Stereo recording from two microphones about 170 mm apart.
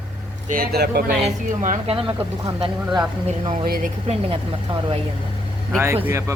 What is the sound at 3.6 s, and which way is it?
Speech, 60° right (ahead or behind).